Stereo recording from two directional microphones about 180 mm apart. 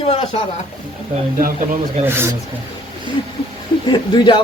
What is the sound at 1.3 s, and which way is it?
Speech, 50° right (ahead or behind).